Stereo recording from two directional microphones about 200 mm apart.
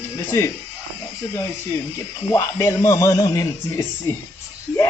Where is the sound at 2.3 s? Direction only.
15° left (ahead or behind).